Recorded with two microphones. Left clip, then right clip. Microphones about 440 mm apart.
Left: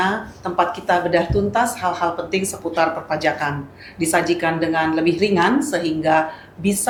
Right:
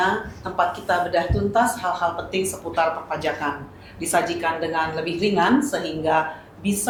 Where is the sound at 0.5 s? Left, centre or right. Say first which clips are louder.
Left 3 dB; left.